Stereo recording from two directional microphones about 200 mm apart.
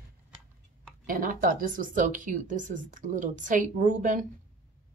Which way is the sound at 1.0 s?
45° right (ahead or behind).